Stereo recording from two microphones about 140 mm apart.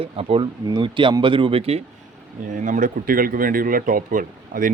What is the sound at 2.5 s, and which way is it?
Speech, 65° right (ahead or behind).